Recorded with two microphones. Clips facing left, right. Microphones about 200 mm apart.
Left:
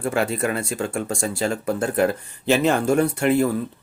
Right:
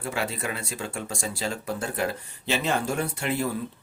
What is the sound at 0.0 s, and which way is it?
Speech, 50° left (ahead or behind).